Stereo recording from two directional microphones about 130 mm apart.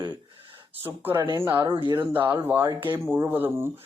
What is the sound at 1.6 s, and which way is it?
Speech, 40° right (ahead or behind).